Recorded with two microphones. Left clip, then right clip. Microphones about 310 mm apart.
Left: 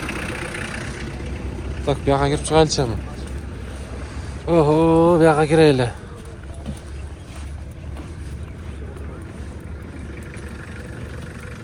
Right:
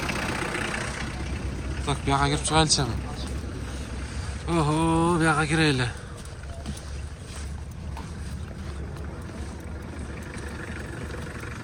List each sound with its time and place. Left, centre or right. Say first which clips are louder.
0.0 s vehicle: left 1 dB; right
1.8 s speech: left 6 dB; centre
4.4 s speech: left 9 dB; centre